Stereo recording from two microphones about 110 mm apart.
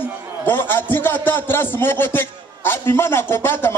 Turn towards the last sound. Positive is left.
turn(degrees=20)  # may be behind; listen again after turning